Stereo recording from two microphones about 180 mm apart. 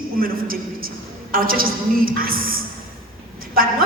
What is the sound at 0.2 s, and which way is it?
A woman's voice, 55° right (ahead or behind).